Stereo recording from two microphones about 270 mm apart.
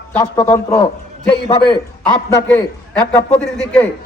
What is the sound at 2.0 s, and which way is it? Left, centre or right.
Speech, centre.